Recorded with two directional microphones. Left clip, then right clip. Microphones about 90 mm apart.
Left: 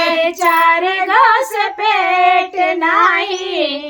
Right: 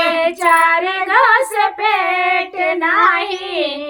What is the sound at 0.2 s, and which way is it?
Child singing, 20° left (ahead or behind).